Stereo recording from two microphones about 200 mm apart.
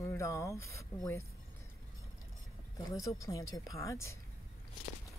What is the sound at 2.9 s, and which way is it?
Speech, 15° left (ahead or behind).